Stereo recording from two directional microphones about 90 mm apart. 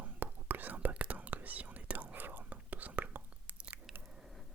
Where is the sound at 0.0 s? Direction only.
20° right (ahead or behind).